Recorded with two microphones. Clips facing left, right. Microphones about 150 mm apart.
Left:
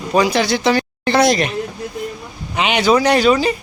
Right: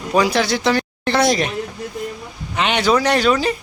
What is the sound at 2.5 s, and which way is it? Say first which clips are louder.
Speech: left 2 dB; 5° left (ahead or behind).